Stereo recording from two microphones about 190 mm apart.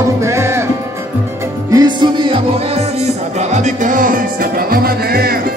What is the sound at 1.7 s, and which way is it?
Music, 25° right (ahead or behind).